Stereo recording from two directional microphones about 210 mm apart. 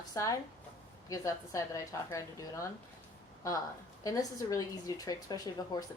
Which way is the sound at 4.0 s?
15° left (ahead or behind).